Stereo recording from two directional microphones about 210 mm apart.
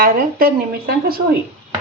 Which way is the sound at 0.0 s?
45° right (ahead or behind).